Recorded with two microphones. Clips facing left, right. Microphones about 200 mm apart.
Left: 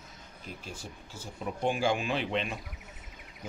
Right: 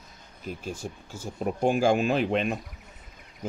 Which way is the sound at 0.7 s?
50° right (ahead or behind).